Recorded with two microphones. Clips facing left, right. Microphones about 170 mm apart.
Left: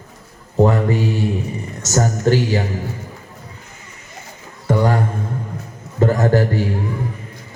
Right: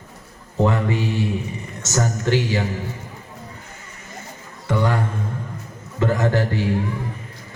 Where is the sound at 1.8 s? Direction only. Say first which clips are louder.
Left 5 dB; 40° left (ahead or behind).